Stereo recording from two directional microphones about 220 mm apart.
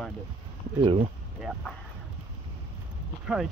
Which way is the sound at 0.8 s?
25° right (ahead or behind).